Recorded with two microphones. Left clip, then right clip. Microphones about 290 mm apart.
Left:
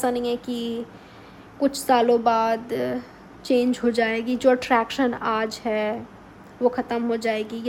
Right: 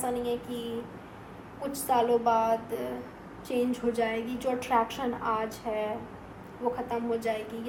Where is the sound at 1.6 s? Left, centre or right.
Left.